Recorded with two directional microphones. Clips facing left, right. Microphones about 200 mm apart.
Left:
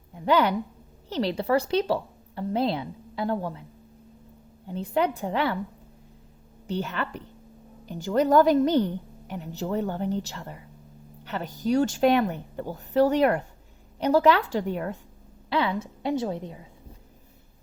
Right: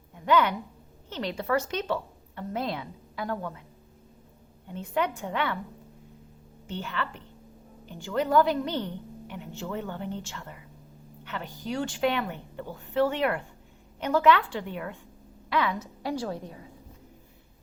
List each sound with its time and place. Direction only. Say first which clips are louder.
0.1 s a sound: left 2 dB; 35° left (ahead or behind)
1.1 s a woman's voice: left 4 dB; 35° left (ahead or behind)
4.7 s a woman's voice: left 4 dB; 35° left (ahead or behind)
6.7 s a woman's voice: left 4 dB; 40° left (ahead or behind)
15.4 s a woman's voice: left 2 dB; 30° left (ahead or behind)